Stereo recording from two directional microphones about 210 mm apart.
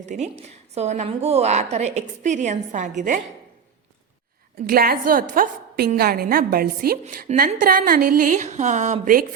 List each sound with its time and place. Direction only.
0.0 s a woman's voice: 35° right (ahead or behind)
4.6 s a woman's voice: 45° right (ahead or behind)